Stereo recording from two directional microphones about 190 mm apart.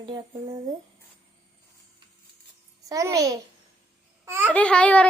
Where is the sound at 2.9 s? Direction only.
15° right (ahead or behind).